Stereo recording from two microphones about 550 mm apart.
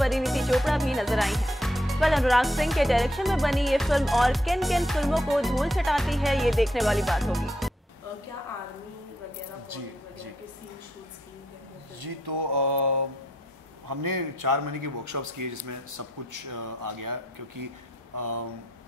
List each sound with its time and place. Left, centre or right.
0.0 s speech: centre
9.7 s a man's voice: right
12.0 s mantra: right
13.8 s a man's voice: right